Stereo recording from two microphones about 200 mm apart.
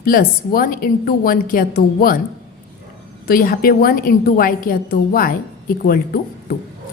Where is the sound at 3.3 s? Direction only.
45° left (ahead or behind).